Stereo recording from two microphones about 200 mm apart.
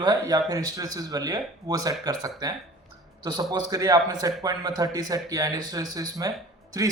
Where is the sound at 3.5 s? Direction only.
20° right (ahead or behind).